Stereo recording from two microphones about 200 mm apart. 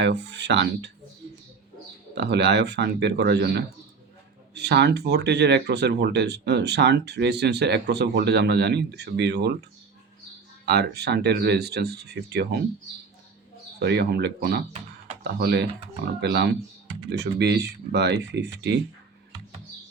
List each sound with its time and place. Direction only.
0.0 s speech: 60° right (ahead or behind)
2.1 s speech: 60° right (ahead or behind)
10.7 s speech: 55° right (ahead or behind)
13.7 s speech: 55° right (ahead or behind)